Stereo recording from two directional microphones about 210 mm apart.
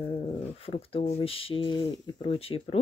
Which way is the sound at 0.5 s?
30° left (ahead or behind).